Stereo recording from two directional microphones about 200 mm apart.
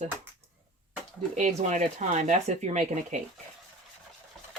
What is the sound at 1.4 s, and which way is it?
Speech, 35° right (ahead or behind).